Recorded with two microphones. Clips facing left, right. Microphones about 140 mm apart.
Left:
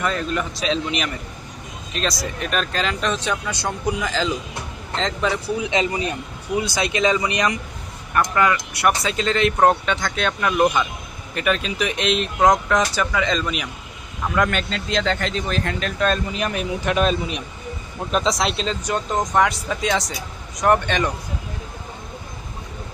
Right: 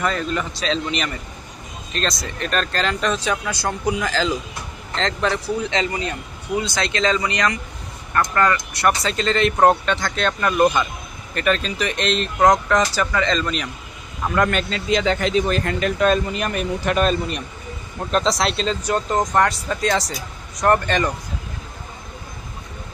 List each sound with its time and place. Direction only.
0.0 s speech: centre (ahead or behind)
5.6 s speech: 15° left (ahead or behind); by 21.1 s centre (ahead or behind)